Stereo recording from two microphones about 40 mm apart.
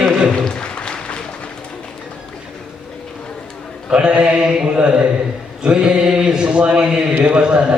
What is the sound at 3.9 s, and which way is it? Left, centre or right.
Speech, right.